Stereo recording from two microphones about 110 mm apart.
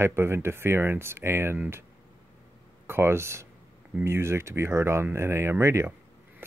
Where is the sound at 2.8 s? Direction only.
20° right (ahead or behind).